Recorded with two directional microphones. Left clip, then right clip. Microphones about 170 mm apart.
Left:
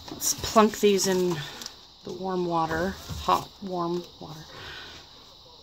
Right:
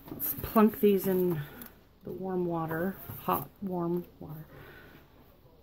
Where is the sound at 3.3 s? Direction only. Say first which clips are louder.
Left 7 dB; 5° left (ahead or behind).